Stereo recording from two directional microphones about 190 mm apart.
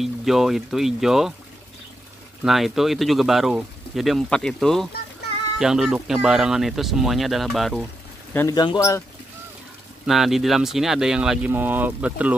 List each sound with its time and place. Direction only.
0.0 s speech: centre (ahead or behind)
2.4 s speech: centre (ahead or behind)
8.3 s a man's voice: 15° left (ahead or behind)
10.0 s speech: centre (ahead or behind)